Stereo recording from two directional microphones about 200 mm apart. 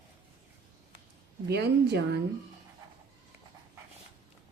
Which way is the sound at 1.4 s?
55° right (ahead or behind).